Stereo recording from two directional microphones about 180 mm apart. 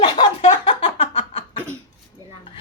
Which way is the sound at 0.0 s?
30° left (ahead or behind).